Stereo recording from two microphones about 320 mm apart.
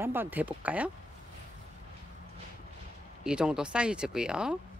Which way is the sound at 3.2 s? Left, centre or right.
Centre.